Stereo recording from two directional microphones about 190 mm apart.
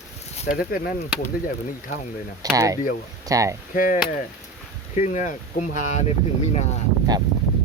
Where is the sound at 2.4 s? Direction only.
20° right (ahead or behind).